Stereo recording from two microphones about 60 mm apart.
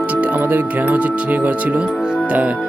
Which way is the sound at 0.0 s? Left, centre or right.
Right.